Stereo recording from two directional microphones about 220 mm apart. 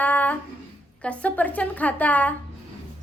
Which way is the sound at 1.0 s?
5° left (ahead or behind).